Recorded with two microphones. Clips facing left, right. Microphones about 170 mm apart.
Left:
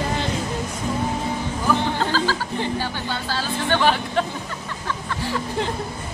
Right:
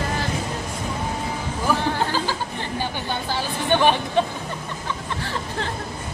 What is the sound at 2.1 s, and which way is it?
Chatter, 15° right (ahead or behind).